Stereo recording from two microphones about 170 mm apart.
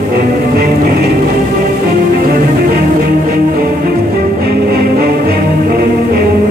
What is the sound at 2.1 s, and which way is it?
Music, 60° right (ahead or behind).